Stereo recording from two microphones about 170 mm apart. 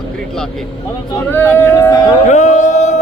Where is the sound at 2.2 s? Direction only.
45° left (ahead or behind).